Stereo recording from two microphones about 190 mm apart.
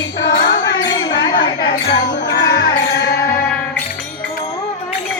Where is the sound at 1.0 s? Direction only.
25° left (ahead or behind).